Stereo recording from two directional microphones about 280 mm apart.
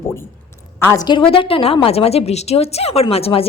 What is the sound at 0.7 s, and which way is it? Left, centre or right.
A woman's voice, centre.